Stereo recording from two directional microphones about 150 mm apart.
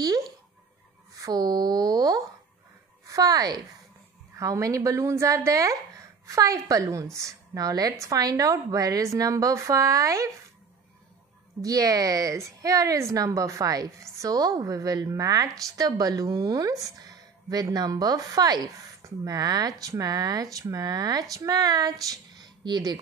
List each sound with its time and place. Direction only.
1.1 s a woman's voice: 25° right (ahead or behind)
11.6 s a woman's voice: 25° right (ahead or behind)
22.1 s a sound: 30° right (ahead or behind)